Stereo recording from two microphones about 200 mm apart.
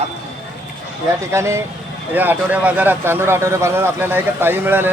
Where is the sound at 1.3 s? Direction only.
15° right (ahead or behind).